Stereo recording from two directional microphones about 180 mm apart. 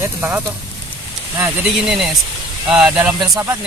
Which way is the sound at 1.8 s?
Centre (ahead or behind).